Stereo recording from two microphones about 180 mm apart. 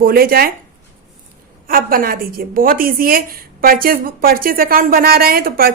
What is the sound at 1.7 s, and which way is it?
A woman's voice, 55° right (ahead or behind).